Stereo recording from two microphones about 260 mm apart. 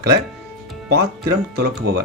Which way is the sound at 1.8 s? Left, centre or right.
Right.